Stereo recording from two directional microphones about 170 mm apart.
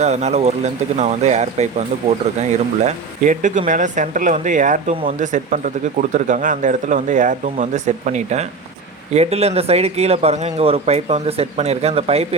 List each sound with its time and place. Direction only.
0.0 s speech: 40° right (ahead or behind)